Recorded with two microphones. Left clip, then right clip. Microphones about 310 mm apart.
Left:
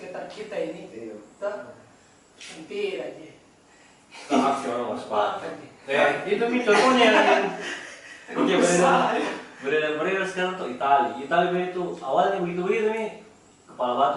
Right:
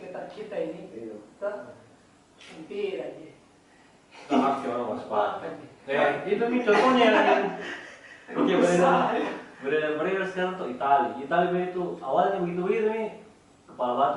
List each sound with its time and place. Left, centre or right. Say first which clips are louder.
0.0 s a sound: left 2 dB; centre
1.4 s a man's voice: left 2 dB; centre
4.4 s speech: left 2 dB; centre
11.9 s speech: left 2 dB; right
12.2 s speech: left 2 dB; centre
13.9 s speech: left 2 dB; right